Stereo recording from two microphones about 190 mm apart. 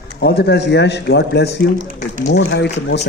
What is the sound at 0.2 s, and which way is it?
A man's voice, 60° left (ahead or behind).